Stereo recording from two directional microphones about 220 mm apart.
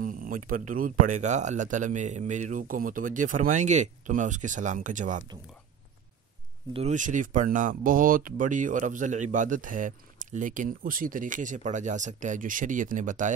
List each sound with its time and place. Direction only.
0.5 s speech: 40° right (ahead or behind)
6.7 s speech: 30° right (ahead or behind)